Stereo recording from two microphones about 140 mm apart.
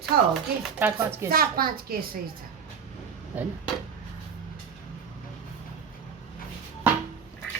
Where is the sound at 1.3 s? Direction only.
90° right.